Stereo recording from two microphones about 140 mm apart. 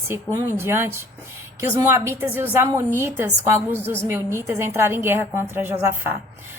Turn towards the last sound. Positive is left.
turn(degrees=-15)  # may be behind; listen again after turning